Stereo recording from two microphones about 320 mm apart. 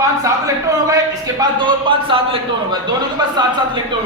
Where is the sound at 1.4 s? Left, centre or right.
Centre.